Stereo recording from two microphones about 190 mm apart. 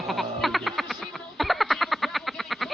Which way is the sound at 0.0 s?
Centre (ahead or behind).